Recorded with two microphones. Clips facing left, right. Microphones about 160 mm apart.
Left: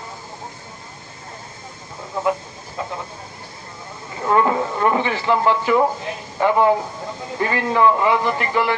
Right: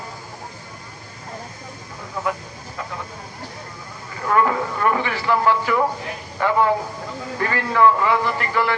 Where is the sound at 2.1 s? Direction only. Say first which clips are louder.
Left 4 dB; 25° left (ahead or behind).